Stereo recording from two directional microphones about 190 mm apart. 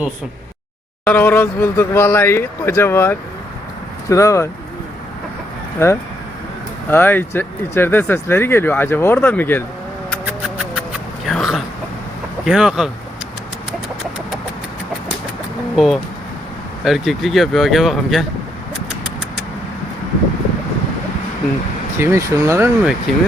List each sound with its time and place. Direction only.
1.0 s speech: 10° left (ahead or behind)
5.8 s speech: 15° left (ahead or behind)
10.2 s music: 5° right (ahead or behind)
11.3 s a sound: centre (ahead or behind)
12.5 s speech: 5° right (ahead or behind)
15.7 s speech: centre (ahead or behind)
21.9 s speech: 15° right (ahead or behind)
23.1 s speech: centre (ahead or behind)